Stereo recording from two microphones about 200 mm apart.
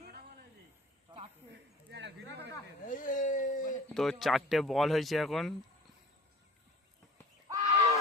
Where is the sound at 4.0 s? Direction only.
Centre (ahead or behind).